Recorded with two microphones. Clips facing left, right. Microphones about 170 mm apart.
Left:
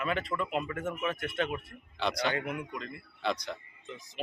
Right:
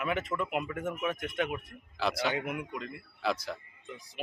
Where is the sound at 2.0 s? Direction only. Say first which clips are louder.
Even; 5° right (ahead or behind).